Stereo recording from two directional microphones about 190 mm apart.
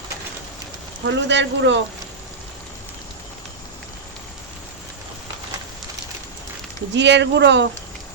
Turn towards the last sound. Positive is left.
turn(degrees=-65)  # may be behind; listen again after turning